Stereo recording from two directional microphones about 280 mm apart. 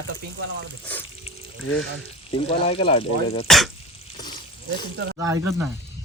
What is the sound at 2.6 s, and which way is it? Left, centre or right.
Speech, left.